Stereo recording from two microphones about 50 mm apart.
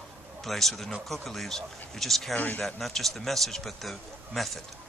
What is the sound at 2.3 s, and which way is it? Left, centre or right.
Speech, left.